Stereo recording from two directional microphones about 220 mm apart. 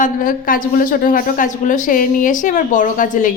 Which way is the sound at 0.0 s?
40° left (ahead or behind).